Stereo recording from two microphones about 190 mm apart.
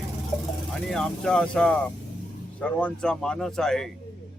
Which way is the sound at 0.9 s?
5° left (ahead or behind).